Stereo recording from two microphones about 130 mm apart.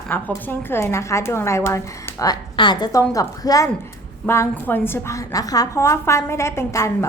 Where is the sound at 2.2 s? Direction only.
30° left (ahead or behind).